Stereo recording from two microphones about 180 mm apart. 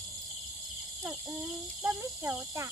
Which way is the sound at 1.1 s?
10° right (ahead or behind).